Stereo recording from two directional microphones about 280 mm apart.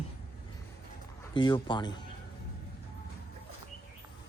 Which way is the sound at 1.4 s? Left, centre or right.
Centre.